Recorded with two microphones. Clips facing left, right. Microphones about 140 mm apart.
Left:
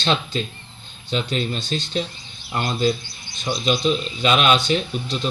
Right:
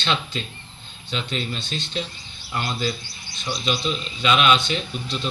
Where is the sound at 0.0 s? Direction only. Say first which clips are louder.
Left 4 dB; 35° left (ahead or behind).